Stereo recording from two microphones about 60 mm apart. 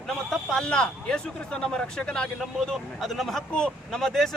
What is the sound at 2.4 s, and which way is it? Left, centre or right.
Speech, centre.